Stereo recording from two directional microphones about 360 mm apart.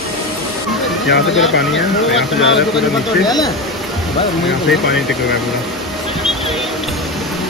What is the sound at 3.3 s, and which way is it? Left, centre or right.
Speech, centre.